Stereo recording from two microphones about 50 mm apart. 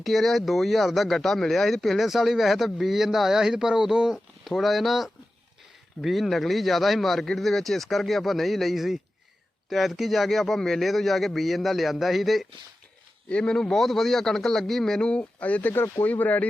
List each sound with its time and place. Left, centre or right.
0.0 s speech: centre
13.2 s speech: left
13.7 s a man's voice: centre
15.1 s speech: left
15.7 s speech: left
16.0 s speech: left